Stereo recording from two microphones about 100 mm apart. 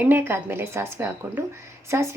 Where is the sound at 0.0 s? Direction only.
20° right (ahead or behind).